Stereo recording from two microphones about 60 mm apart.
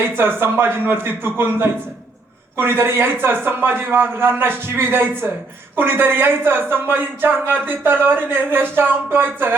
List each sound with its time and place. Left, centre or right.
0.2 s speech: right